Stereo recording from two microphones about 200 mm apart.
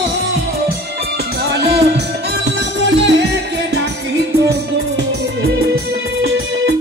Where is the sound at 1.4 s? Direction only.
55° right (ahead or behind).